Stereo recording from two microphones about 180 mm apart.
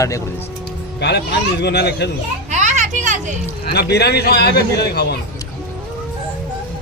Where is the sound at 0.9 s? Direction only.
70° left (ahead or behind).